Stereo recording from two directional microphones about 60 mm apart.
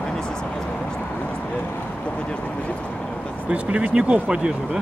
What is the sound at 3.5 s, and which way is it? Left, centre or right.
Speech, right.